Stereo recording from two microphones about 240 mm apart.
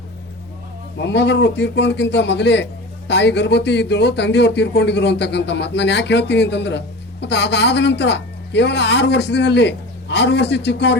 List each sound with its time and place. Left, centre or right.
0.9 s speech: left